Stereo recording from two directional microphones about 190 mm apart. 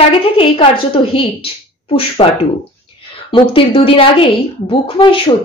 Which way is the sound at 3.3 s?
25° left (ahead or behind).